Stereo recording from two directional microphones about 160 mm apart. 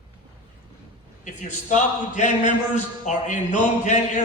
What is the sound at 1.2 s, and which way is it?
Speech, 50° left (ahead or behind).